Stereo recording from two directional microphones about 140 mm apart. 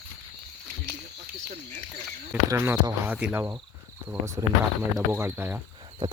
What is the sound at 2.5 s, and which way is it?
Speech, 20° right (ahead or behind).